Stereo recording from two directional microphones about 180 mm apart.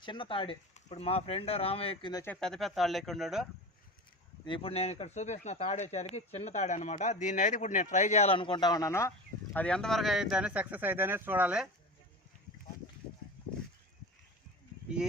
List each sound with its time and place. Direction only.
0.0 s speech: 25° left (ahead or behind)
2.2 s speech: 5° left (ahead or behind)
4.4 s speech: 30° left (ahead or behind); by 11.7 s 5° right (ahead or behind)